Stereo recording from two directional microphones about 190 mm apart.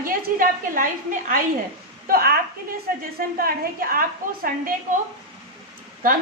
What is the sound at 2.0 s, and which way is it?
A woman's voice, 50° right (ahead or behind).